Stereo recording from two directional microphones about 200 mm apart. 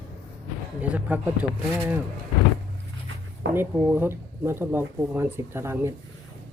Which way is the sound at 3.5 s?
10° right (ahead or behind).